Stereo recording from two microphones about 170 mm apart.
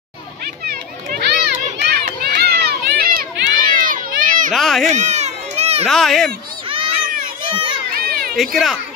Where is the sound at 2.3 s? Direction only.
70° right (ahead or behind); by 4.5 s 50° right (ahead or behind).